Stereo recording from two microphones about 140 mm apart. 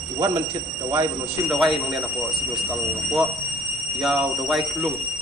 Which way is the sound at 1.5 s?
Centre (ahead or behind).